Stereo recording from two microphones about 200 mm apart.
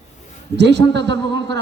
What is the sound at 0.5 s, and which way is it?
A man's voice, 60° right (ahead or behind).